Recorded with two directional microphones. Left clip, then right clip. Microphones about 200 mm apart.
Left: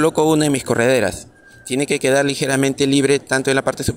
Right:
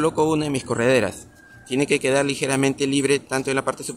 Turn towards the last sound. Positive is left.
turn(degrees=25)  # may be behind; listen again after turning